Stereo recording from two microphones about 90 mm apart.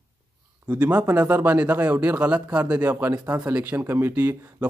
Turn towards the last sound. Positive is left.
turn(degrees=-20)  # may be behind; listen again after turning